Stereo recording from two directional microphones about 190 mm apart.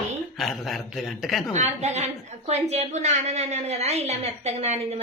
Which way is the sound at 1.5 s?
35° right (ahead or behind).